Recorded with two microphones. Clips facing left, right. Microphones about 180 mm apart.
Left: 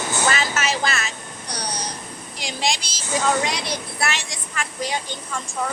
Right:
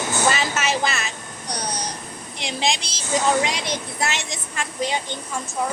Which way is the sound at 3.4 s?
20° right (ahead or behind).